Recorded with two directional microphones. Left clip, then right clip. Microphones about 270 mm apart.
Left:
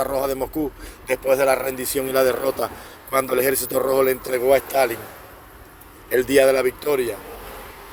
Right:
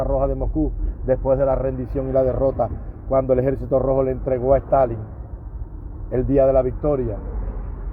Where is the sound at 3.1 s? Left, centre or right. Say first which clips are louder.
Right 1 dB; left.